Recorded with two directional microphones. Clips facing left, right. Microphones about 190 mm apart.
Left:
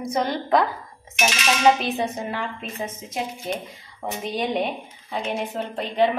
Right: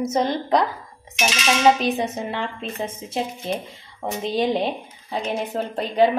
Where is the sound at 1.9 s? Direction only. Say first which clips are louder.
Right 1 dB; 20° right (ahead or behind).